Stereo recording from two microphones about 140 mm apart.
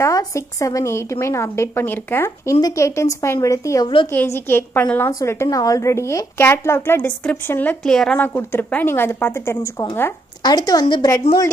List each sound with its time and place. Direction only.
0.0 s a woman's voice: 25° left (ahead or behind)
10.4 s a woman's voice: 30° left (ahead or behind)